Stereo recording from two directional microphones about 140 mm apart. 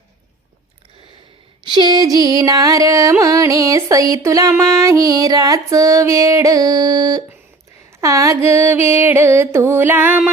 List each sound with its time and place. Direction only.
1.6 s a sound: 30° right (ahead or behind)
2.1 s music: 30° right (ahead or behind)
8.0 s mantra: 20° right (ahead or behind)